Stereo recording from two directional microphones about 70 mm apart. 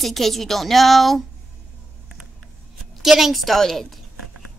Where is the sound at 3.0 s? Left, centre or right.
Centre.